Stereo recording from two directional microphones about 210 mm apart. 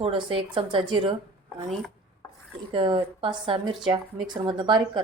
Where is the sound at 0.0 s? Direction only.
25° right (ahead or behind).